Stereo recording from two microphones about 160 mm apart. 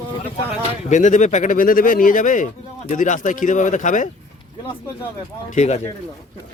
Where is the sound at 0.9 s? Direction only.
50° left (ahead or behind).